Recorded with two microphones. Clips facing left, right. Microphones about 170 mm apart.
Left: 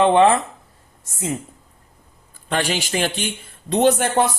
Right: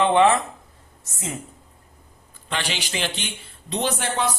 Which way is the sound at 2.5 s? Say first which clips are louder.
Left 7 dB; 45° left (ahead or behind).